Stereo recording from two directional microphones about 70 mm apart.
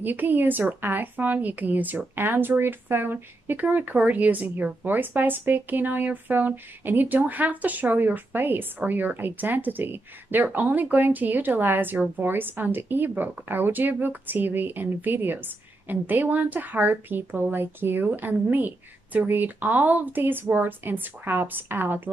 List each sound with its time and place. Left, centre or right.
0.0 s speech: right